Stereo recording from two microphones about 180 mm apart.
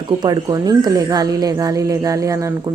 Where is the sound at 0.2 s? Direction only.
20° right (ahead or behind).